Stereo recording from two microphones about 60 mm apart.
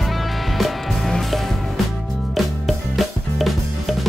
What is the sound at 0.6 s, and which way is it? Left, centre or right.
Music, centre.